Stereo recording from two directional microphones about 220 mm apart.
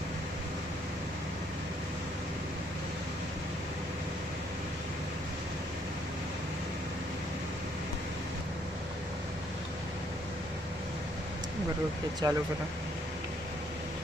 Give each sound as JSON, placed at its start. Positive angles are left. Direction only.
{"t": 12.2, "sound": "speech", "side_deg": -15}